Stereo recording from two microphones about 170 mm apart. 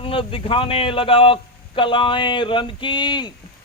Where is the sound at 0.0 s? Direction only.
30° left (ahead or behind).